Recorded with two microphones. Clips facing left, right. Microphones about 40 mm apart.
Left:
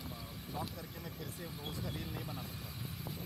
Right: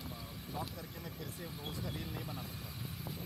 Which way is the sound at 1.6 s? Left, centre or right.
Centre.